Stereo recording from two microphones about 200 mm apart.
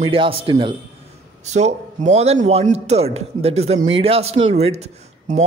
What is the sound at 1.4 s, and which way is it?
A man's voice, 35° right (ahead or behind).